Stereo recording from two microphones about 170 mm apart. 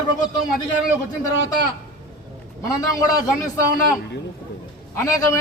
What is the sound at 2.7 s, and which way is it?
Speech, 20° left (ahead or behind).